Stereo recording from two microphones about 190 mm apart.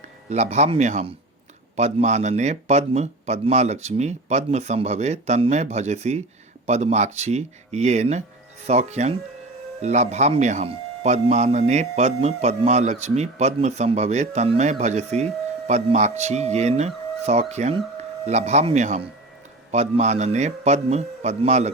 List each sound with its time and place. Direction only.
0.3 s speech: 35° right (ahead or behind)